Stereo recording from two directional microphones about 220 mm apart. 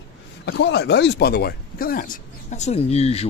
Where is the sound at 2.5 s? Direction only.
30° left (ahead or behind).